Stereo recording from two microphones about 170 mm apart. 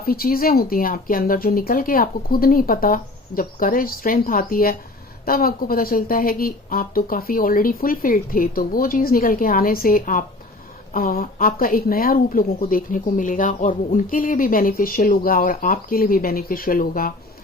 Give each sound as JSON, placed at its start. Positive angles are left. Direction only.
{"t": 0.0, "sound": "speech", "side_deg": 60}